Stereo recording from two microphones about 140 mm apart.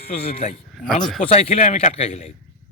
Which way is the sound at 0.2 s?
45° left (ahead or behind).